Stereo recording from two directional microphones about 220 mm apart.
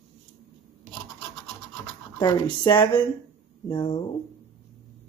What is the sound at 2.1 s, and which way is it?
Speech, 20° left (ahead or behind).